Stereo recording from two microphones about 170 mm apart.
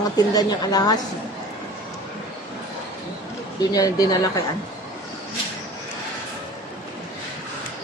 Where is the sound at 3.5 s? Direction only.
20° left (ahead or behind).